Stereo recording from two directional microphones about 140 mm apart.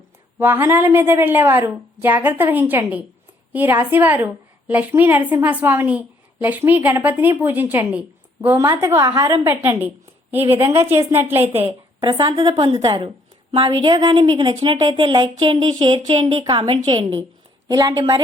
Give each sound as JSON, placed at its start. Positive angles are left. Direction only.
{"t": 0.3, "sound": "a woman's voice", "side_deg": -15}
{"t": 10.3, "sound": "a woman's voice", "side_deg": -45}
{"t": 10.7, "sound": "a woman's voice", "side_deg": -20}
{"t": 11.4, "sound": "a woman's voice", "side_deg": -45}
{"t": 17.7, "sound": "a woman's voice", "side_deg": -25}